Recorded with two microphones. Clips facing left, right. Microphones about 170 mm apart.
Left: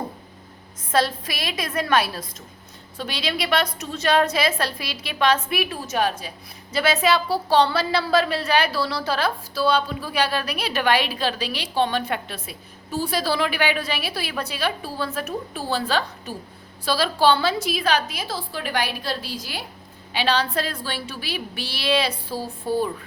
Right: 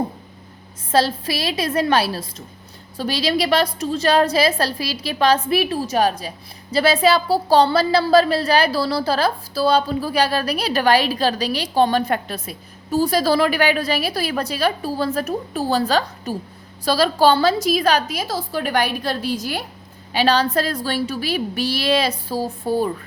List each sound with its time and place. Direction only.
0.9 s a woman's voice: 30° right (ahead or behind)